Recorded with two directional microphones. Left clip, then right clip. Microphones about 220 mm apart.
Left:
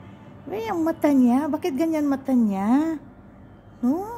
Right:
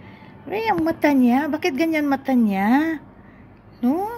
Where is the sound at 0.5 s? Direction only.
15° left (ahead or behind).